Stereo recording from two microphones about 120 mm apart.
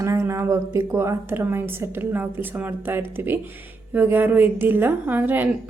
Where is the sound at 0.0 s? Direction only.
25° right (ahead or behind).